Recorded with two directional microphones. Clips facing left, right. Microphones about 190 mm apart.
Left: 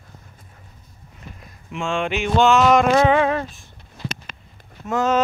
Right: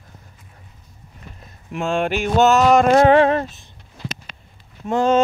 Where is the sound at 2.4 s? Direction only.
40° right (ahead or behind).